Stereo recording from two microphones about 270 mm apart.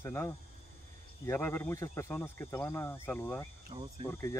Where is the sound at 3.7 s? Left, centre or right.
Right.